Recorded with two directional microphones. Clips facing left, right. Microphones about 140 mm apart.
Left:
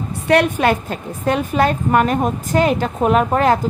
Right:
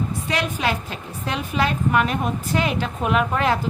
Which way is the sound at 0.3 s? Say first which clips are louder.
Left 11 dB; 60° left (ahead or behind).